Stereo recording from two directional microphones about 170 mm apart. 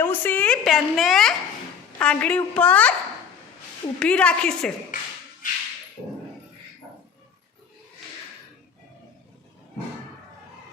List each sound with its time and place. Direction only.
0.0 s a woman's voice: 10° left (ahead or behind)
4.0 s a woman's voice: 5° left (ahead or behind)
5.4 s whip: 50° left (ahead or behind)